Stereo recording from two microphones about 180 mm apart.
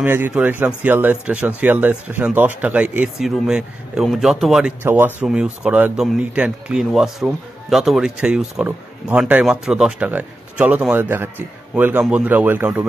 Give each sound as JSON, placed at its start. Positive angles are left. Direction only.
{"t": 0.0, "sound": "speech", "side_deg": -10}